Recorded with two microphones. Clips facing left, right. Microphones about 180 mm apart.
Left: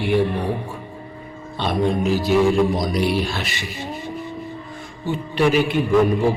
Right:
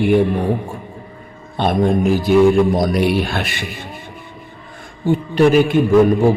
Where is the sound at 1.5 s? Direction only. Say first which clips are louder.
Right 5 dB; 50° right (ahead or behind).